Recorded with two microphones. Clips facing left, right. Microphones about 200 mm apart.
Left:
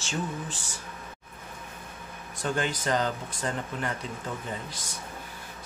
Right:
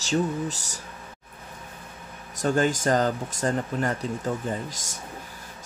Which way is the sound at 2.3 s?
45° right (ahead or behind).